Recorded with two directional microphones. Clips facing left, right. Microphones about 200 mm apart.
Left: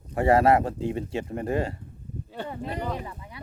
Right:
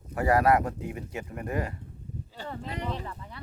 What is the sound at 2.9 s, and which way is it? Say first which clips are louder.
Speech: left 2 dB; 10° left (ahead or behind).